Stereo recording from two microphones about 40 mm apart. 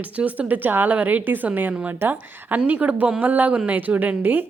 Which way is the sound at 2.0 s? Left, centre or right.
Right.